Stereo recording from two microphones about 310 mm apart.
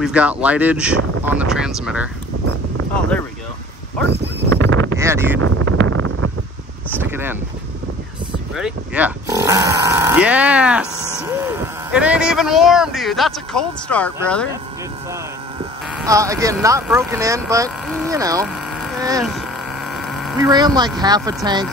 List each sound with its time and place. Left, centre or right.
0.0 s speech: centre
4.6 s a sound: right
4.9 s a sound: centre
5.4 s wind noise: right
7.0 s speech: centre
8.5 s speech: centre
15.9 s speech: centre
17.6 s a sound: centre
18.2 s vehicle: centre
19.9 s mains hum: centre
20.3 s speech: centre